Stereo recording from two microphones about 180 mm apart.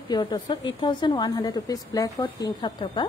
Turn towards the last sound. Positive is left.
turn(degrees=25)  # may be behind; listen again after turning